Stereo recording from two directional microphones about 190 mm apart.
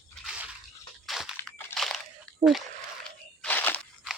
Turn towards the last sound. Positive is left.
turn(degrees=10)  # may be behind; listen again after turning